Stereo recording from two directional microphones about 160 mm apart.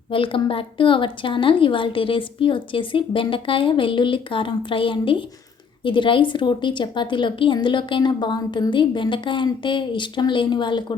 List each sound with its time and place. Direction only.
0.1 s a woman's voice: 35° left (ahead or behind)